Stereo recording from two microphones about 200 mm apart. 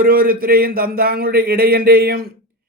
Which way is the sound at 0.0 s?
50° right (ahead or behind).